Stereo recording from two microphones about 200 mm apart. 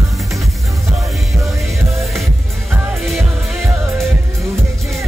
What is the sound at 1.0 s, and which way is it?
Music, centre (ahead or behind).